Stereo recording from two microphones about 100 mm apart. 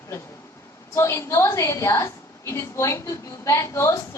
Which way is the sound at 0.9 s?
30° left (ahead or behind).